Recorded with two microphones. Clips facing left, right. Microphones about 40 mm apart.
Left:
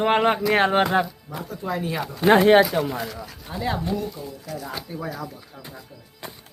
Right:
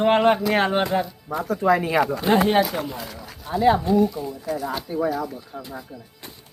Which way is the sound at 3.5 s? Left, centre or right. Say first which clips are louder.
Right 9 dB; centre.